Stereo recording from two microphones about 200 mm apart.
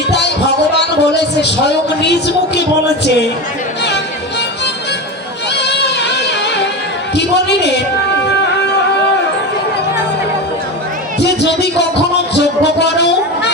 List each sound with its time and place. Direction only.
0.1 s a man's voice: 60° left (ahead or behind)
3.8 s music: 60° left (ahead or behind)
7.2 s a man's voice: 60° left (ahead or behind)
8.3 s music: 60° left (ahead or behind)
11.2 s music: 55° left (ahead or behind)